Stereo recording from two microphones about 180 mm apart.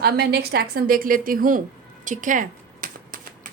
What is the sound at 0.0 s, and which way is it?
A woman's voice, 60° right (ahead or behind).